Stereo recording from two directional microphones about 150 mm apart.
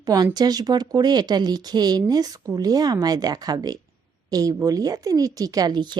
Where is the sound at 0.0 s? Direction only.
25° right (ahead or behind).